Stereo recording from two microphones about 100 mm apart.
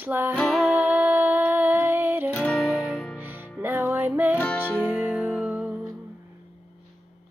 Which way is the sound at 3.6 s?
20° right (ahead or behind).